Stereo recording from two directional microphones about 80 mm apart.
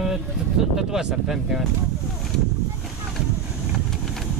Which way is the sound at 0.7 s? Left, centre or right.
Centre.